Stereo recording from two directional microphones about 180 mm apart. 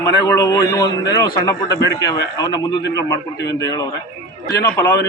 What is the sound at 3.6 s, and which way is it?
Speech, 20° left (ahead or behind).